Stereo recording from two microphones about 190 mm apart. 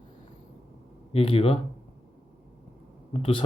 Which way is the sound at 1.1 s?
30° left (ahead or behind).